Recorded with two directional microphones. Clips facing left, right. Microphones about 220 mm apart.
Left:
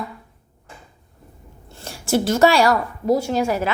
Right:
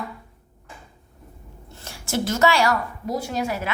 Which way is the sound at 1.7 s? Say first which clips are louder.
Left 6 dB; 30° left (ahead or behind).